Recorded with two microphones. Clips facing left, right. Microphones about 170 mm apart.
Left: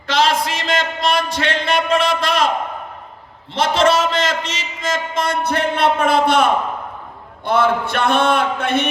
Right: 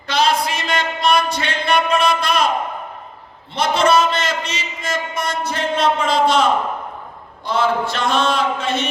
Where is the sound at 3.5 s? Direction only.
90° left; by 6.4 s 55° left (ahead or behind).